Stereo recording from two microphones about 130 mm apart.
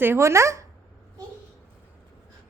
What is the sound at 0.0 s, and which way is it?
Speech, 20° right (ahead or behind).